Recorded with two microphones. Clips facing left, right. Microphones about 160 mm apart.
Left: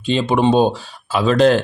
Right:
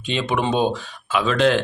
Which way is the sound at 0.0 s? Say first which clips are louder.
Left 6 dB; 30° left (ahead or behind).